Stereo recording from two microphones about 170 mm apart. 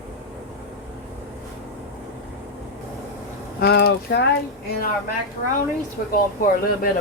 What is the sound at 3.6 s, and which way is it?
Speech, 65° left (ahead or behind).